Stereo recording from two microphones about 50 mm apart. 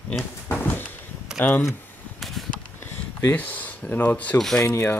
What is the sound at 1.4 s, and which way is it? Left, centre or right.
Speech, left.